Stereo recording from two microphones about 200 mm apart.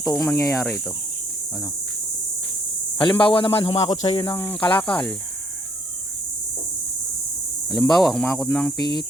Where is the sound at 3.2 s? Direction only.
25° left (ahead or behind).